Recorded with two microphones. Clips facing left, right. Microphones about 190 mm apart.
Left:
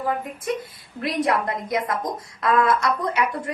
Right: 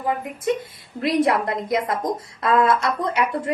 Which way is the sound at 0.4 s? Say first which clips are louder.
Right 6 dB; 25° right (ahead or behind).